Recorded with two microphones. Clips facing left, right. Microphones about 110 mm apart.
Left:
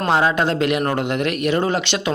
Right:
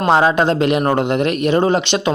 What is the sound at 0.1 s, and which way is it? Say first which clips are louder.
Speech: right 4 dB; 25° right (ahead or behind).